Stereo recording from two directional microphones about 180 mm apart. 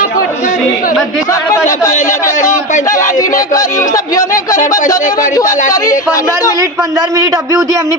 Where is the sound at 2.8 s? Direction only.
20° left (ahead or behind).